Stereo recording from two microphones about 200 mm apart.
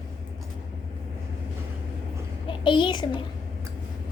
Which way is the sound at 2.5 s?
25° left (ahead or behind).